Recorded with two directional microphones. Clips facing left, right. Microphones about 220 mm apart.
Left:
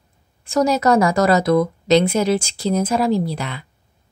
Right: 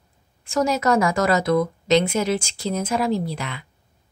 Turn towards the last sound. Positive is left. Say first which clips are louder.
# left 4 dB
turn(degrees=35)  # may be behind; listen again after turning